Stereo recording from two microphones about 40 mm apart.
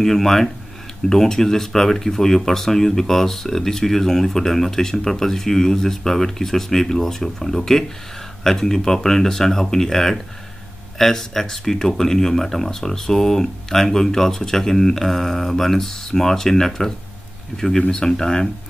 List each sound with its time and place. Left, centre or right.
0.0 s speech: centre